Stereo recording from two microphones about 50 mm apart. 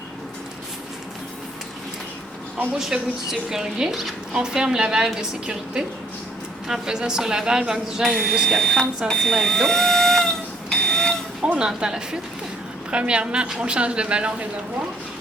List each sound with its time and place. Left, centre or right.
2.7 s a woman's voice: centre
8.0 s speech: centre
9.0 s a sound: centre
11.5 s a woman's voice: centre